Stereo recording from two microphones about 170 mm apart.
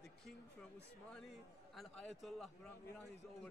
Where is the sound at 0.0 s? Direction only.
Centre (ahead or behind).